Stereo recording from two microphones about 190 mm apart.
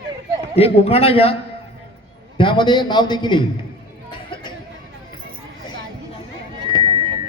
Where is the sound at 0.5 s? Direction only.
30° left (ahead or behind).